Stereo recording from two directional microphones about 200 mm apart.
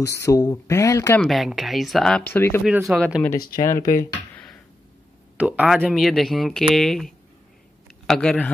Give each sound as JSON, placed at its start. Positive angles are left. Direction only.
{"t": 0.0, "sound": "speech", "side_deg": 15}
{"t": 1.2, "sound": "speech", "side_deg": 0}
{"t": 2.6, "sound": "speech", "side_deg": -5}
{"t": 3.0, "sound": "speech", "side_deg": 5}
{"t": 3.5, "sound": "speech", "side_deg": 15}
{"t": 5.4, "sound": "speech", "side_deg": -5}
{"t": 8.1, "sound": "speech", "side_deg": 5}